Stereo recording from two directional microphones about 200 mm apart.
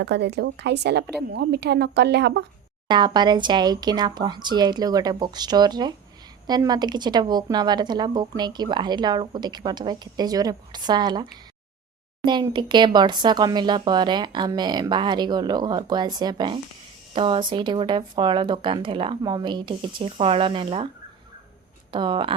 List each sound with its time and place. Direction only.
0.0 s a woman's voice: 55° right (ahead or behind)
2.9 s speech: 20° right (ahead or behind)
21.9 s speech: 25° right (ahead or behind)